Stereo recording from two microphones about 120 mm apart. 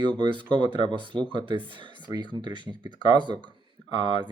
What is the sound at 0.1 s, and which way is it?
Speech, 45° right (ahead or behind).